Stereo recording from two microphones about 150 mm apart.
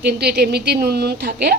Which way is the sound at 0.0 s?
90° right.